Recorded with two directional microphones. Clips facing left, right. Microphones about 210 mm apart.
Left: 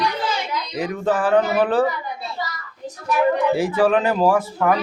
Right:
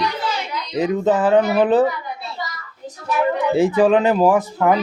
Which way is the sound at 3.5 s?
20° right (ahead or behind).